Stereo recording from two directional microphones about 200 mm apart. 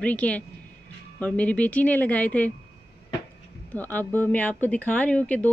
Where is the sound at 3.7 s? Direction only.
10° left (ahead or behind).